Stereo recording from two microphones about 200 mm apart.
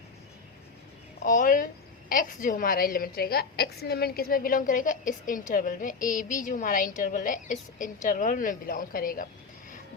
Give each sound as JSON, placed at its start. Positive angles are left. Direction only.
{"t": 1.2, "sound": "a woman's voice", "side_deg": 45}